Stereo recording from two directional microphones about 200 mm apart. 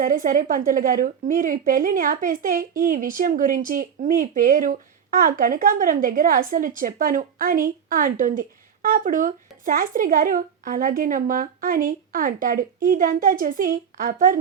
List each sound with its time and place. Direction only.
0.0 s a woman's voice: 40° right (ahead or behind)